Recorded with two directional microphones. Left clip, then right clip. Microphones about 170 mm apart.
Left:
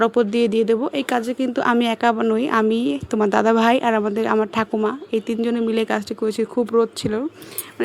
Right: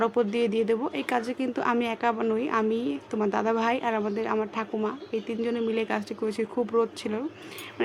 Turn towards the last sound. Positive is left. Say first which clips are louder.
# left 7 dB
turn(degrees=30)  # may be behind; listen again after turning